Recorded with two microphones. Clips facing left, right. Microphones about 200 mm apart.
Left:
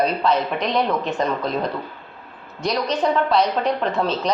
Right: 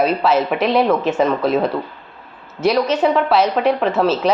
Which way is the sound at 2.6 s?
5° right (ahead or behind).